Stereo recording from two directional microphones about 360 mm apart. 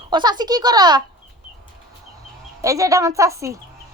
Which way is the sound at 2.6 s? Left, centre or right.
Centre.